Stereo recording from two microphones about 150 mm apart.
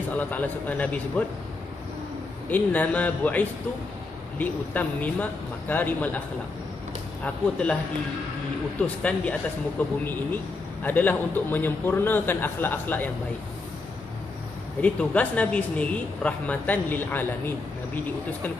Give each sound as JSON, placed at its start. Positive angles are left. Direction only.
{"t": 0.3, "sound": "a man's voice", "side_deg": 10}
{"t": 2.5, "sound": "a man's voice", "side_deg": 10}
{"t": 7.2, "sound": "a man's voice", "side_deg": 10}
{"t": 8.8, "sound": "a man's voice", "side_deg": 10}
{"t": 14.8, "sound": "a man's voice", "side_deg": 10}